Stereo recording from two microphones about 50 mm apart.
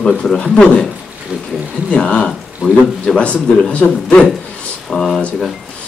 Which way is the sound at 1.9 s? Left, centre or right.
Left.